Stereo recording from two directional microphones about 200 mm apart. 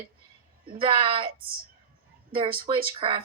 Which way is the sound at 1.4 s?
45° right (ahead or behind).